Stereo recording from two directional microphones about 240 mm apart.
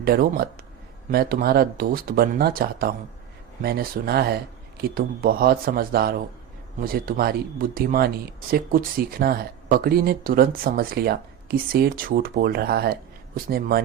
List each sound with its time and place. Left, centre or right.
0.0 s speech: right